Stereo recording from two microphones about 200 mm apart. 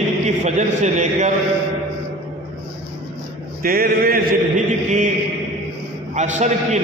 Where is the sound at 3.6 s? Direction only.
45° right (ahead or behind).